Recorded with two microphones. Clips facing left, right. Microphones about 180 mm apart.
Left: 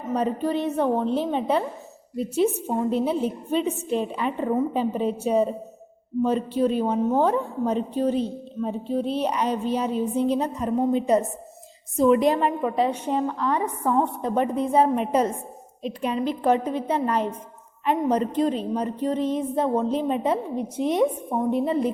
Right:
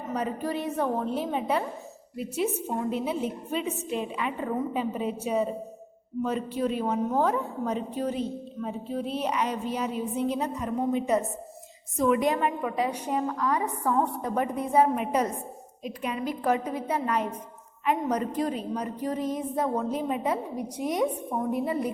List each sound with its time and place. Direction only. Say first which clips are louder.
0.2 s a woman's voice: left 6 dB; 25° left (ahead or behind)
2.9 s a woman's voice: left 5 dB; 30° left (ahead or behind)